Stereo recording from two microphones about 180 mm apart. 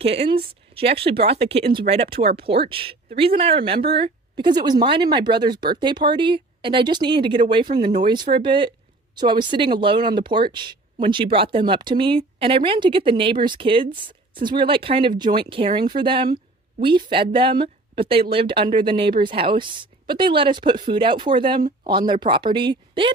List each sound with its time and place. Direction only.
0.0 s speech: 35° right (ahead or behind)